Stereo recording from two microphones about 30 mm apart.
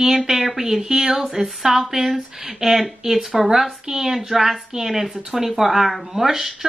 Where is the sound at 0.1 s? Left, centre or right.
Centre.